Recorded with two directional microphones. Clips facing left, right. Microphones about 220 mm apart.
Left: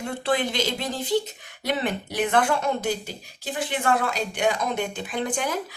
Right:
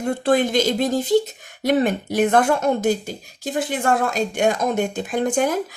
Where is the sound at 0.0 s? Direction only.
45° right (ahead or behind).